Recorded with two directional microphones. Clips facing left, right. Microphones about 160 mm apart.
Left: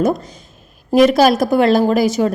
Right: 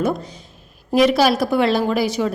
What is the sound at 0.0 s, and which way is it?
A woman's voice, 40° left (ahead or behind).